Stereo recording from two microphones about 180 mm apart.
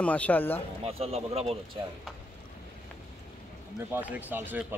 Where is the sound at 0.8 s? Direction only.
35° right (ahead or behind).